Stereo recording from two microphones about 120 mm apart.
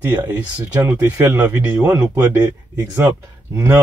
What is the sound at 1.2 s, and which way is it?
Speech, 20° right (ahead or behind).